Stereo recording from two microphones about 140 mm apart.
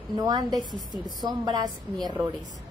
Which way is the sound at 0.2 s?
25° right (ahead or behind).